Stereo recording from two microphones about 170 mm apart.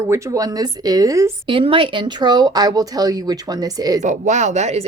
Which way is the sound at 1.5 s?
30° right (ahead or behind).